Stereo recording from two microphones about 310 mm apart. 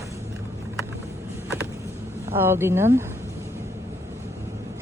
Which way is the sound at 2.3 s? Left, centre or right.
Centre.